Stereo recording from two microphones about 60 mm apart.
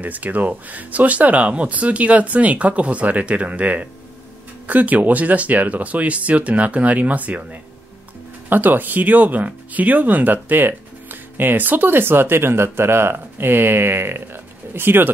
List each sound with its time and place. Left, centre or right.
0.0 s speech: right